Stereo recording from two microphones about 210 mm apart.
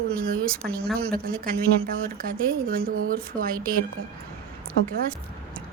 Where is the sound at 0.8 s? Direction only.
5° left (ahead or behind).